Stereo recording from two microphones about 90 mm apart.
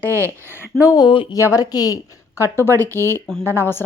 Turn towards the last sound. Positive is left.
turn(degrees=25)  # may be behind; listen again after turning